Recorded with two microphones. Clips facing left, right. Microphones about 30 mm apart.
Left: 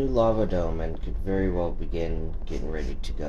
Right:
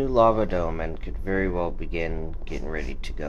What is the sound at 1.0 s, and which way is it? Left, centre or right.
Speech, right.